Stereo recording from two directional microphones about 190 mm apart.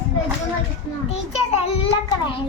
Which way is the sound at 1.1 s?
30° left (ahead or behind).